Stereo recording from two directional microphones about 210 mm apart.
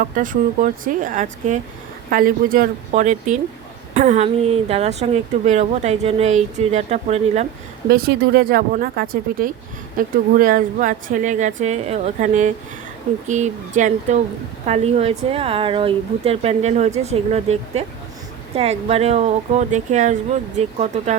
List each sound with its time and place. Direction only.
0.0 s speech: 40° right (ahead or behind)
7.9 s speech: 50° right (ahead or behind); by 21.2 s 30° right (ahead or behind)